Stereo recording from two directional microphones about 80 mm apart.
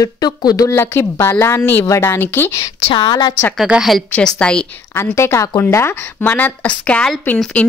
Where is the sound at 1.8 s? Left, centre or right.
Left.